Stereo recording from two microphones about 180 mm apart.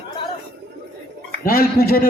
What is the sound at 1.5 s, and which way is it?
Speech, 55° left (ahead or behind).